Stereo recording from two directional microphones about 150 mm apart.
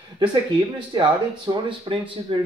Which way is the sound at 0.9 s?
30° right (ahead or behind).